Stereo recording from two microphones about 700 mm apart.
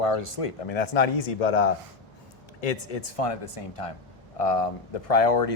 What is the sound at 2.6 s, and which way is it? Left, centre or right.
Speech, left.